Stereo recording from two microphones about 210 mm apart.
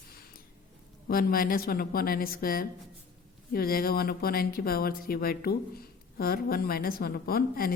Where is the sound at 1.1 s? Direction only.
45° left (ahead or behind).